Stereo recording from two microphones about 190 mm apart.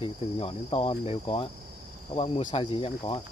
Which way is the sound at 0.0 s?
30° left (ahead or behind).